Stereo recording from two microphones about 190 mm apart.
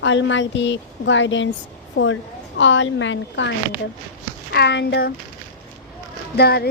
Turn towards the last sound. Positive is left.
turn(degrees=55)  # may be behind; listen again after turning